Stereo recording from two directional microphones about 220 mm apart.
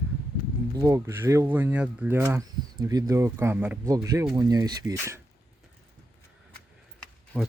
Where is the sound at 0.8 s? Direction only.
15° right (ahead or behind).